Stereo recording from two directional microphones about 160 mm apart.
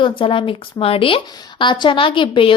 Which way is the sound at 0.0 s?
30° left (ahead or behind).